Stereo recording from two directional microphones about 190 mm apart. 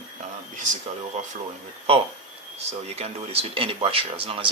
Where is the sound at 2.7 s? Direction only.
30° right (ahead or behind).